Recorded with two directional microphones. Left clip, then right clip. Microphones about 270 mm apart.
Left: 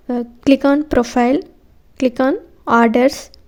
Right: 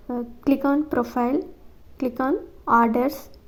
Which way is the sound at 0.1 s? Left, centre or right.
Left.